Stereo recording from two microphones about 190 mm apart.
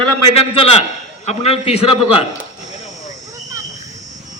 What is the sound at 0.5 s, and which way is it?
A man's voice, 30° left (ahead or behind).